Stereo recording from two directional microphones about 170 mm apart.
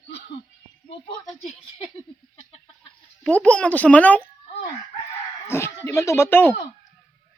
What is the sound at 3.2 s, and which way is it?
Speech, 5° left (ahead or behind).